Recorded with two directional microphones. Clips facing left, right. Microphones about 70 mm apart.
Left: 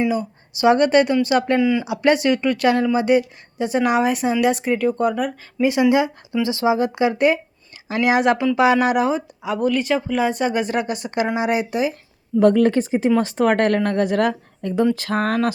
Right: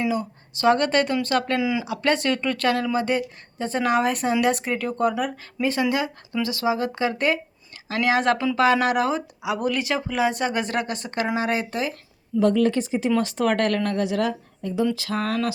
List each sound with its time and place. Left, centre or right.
0.1 s speech: centre
1.5 s speech: centre
1.8 s speech: centre
5.6 s speech: centre
9.4 s speech: centre
12.4 s a woman's voice: left
14.9 s speech: left